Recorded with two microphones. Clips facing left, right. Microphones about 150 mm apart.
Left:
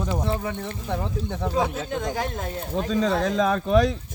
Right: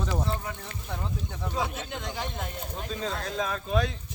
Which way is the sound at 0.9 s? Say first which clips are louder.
Left 7 dB; 70° left (ahead or behind).